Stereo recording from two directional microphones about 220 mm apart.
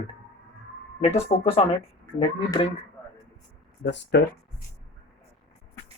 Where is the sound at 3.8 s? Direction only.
50° left (ahead or behind).